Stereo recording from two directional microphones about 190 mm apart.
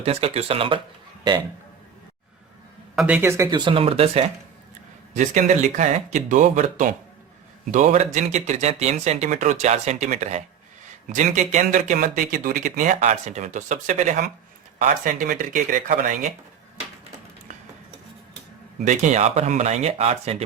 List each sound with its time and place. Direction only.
0.0 s speech: 30° right (ahead or behind)
2.9 s speech: 5° right (ahead or behind); by 16.3 s 45° right (ahead or behind)
18.9 s speech: 40° right (ahead or behind)